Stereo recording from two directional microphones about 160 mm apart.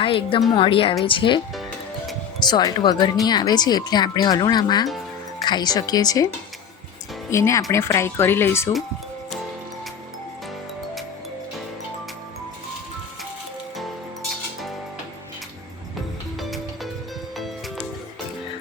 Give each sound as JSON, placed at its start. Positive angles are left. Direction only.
{"t": 0.0, "sound": "a woman's voice", "side_deg": 35}
{"t": 2.4, "sound": "speech", "side_deg": 25}
{"t": 7.3, "sound": "speech", "side_deg": 20}
{"t": 16.4, "sound": "music", "side_deg": 0}